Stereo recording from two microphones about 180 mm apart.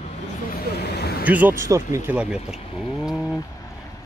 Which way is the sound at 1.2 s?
10° right (ahead or behind).